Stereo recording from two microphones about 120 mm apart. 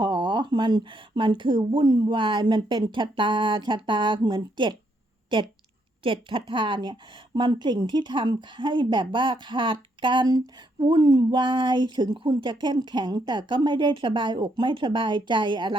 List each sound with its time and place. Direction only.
0.0 s speech: 40° right (ahead or behind)